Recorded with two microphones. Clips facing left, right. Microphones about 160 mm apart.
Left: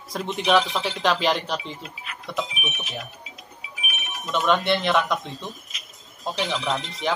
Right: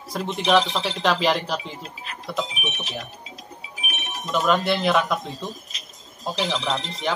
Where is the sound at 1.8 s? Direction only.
35° right (ahead or behind).